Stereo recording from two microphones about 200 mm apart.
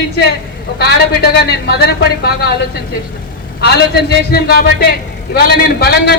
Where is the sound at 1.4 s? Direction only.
55° left (ahead or behind).